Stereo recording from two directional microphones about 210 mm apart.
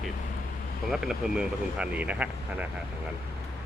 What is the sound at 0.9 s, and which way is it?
Speech, 5° right (ahead or behind).